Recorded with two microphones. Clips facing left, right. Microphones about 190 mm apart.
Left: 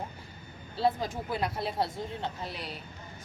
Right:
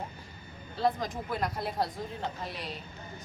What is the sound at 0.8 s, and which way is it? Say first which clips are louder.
Speech: left 1 dB; 5° left (ahead or behind).